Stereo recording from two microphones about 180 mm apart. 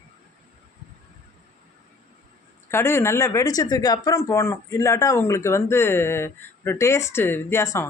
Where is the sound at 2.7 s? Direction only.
15° left (ahead or behind).